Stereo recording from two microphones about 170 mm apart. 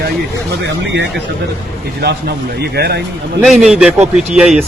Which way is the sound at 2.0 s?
70° right (ahead or behind).